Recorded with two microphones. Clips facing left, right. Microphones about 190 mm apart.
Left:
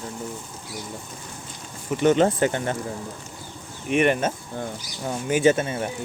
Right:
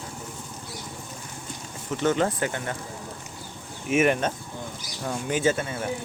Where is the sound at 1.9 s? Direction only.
20° left (ahead or behind).